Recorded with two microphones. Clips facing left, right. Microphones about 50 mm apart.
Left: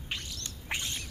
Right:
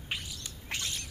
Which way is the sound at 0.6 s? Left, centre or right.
Centre.